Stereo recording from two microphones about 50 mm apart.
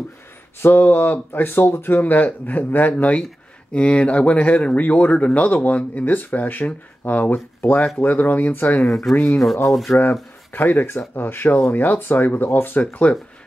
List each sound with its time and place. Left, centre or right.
0.6 s speech: left
2.9 s speech: left
8.8 s speech: centre
10.5 s speech: left
12.4 s speech: left
13.0 s speech: left